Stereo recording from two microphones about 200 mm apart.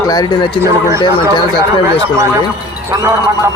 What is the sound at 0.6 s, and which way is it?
Speech, 15° right (ahead or behind).